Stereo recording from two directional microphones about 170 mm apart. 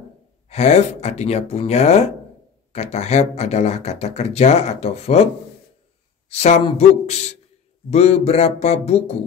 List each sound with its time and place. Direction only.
0.5 s speech: 40° left (ahead or behind)